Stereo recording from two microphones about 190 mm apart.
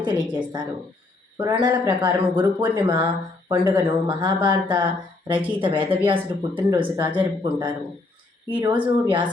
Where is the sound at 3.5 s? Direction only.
25° right (ahead or behind).